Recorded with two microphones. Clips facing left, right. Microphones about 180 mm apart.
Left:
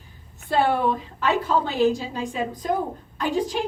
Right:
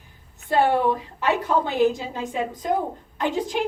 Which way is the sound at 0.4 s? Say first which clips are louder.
Right 1 dB; 15° right (ahead or behind).